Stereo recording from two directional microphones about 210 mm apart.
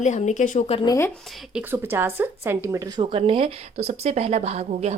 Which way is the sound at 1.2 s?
Centre (ahead or behind).